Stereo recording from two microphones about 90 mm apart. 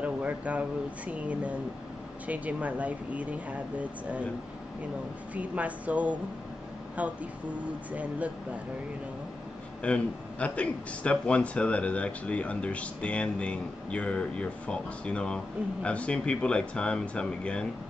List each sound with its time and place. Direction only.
0.0 s speech: 15° right (ahead or behind)
5.3 s speech: 15° right (ahead or behind)
9.8 s speech: 15° left (ahead or behind)